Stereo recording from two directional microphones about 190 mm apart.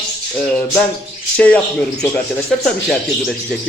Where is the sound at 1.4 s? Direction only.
5° left (ahead or behind).